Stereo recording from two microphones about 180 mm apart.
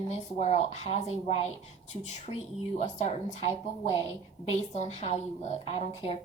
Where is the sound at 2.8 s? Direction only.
40° left (ahead or behind).